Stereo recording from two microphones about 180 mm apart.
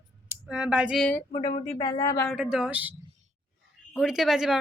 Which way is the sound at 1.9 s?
15° left (ahead or behind).